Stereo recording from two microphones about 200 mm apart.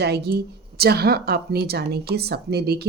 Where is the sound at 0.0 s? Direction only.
55° right (ahead or behind).